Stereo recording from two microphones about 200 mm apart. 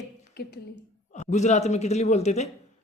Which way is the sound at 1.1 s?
35° left (ahead or behind).